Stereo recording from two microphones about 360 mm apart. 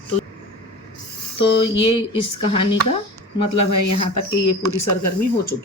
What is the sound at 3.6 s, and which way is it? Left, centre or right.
Speech, left.